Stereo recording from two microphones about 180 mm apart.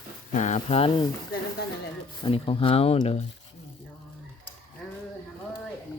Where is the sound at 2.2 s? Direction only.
30° left (ahead or behind).